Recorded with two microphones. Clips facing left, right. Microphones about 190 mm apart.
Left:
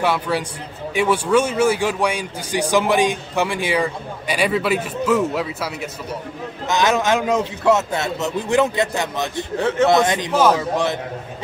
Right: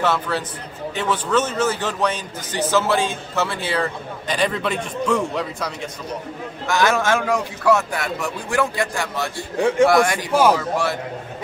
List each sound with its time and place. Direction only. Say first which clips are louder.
0.0 s a man's voice: left 1 dB; 10° left (ahead or behind)
6.7 s a man's voice: left 1 dB; 20° left (ahead or behind)
9.6 s speech: right 2 dB; 10° right (ahead or behind)
9.8 s a man's voice: even; 20° left (ahead or behind)